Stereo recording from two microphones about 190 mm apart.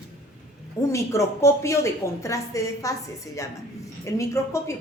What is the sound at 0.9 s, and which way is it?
A woman's voice, 15° left (ahead or behind).